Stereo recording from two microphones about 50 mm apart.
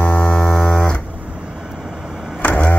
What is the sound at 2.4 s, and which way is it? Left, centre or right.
Vehicle, left.